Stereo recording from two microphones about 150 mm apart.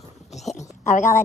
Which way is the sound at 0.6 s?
55° left (ahead or behind).